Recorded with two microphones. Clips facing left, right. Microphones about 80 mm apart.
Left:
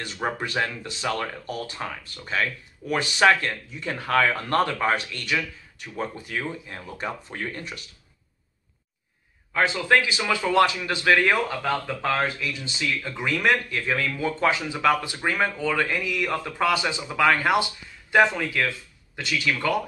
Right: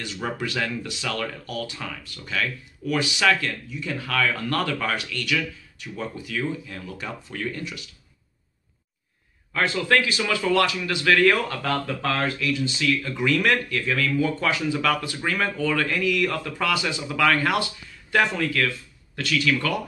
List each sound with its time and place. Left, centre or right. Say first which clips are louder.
0.0 s speech: left 1 dB; left
9.5 s speech: left 1 dB; centre